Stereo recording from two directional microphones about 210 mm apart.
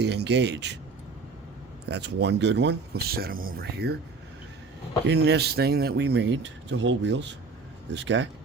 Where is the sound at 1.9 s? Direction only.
55° right (ahead or behind).